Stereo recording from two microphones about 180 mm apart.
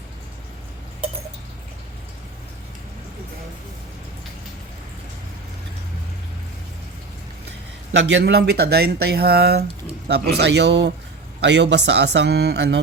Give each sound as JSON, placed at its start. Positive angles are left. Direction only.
{"t": 7.9, "sound": "speech", "side_deg": -75}